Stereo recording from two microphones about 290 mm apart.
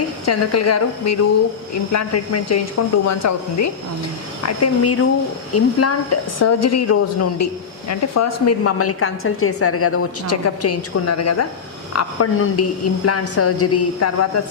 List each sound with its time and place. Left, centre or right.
0.3 s a woman's voice: left
4.4 s a woman's voice: left